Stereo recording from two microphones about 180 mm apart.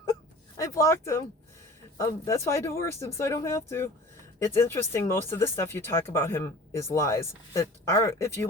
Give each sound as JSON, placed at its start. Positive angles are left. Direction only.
{"t": 0.5, "sound": "speech", "side_deg": 15}